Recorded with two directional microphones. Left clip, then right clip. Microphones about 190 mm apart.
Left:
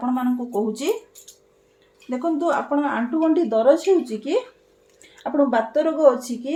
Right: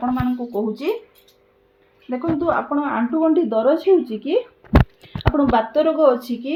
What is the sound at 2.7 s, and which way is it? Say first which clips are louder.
Speech: right 1 dB; 30° right (ahead or behind).